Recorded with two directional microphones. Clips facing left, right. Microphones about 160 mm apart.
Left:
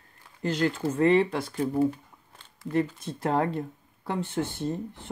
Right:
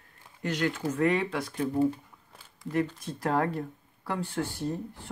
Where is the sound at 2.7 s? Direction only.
25° left (ahead or behind).